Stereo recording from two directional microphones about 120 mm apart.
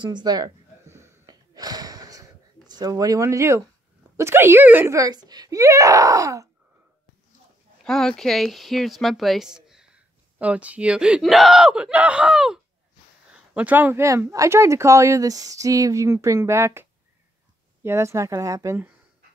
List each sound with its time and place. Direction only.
0.0 s speech: 40° right (ahead or behind)
0.8 s a sound: 20° right (ahead or behind)
1.5 s gasp: 30° right (ahead or behind)
4.2 s speech: 20° right (ahead or behind)
4.9 s speech: 30° right (ahead or behind)
7.8 s speech: 5° left (ahead or behind); by 16.8 s 20° right (ahead or behind)
17.8 s speech: 25° right (ahead or behind)